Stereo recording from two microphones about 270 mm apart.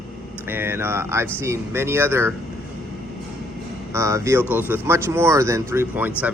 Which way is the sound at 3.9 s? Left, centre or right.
Centre.